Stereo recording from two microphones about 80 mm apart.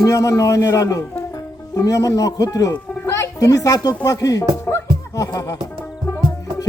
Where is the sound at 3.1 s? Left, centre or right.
Left.